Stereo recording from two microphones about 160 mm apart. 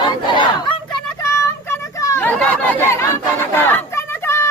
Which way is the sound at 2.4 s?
10° left (ahead or behind).